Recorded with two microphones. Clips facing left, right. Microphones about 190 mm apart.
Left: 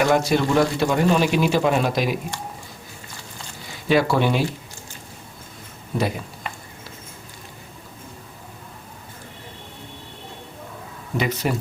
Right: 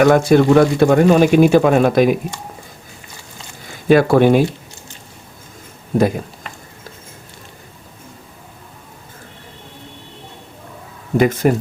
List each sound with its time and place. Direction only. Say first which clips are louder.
0.0 s speech: right 8 dB; 55° right (ahead or behind)
3.7 s speech: right 7 dB; 50° right (ahead or behind)
5.9 s speech: right 9 dB; 45° right (ahead or behind)
11.2 s speech: right 9 dB; 50° right (ahead or behind)